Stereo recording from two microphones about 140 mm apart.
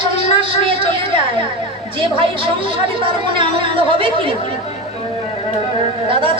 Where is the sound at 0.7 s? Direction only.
40° right (ahead or behind).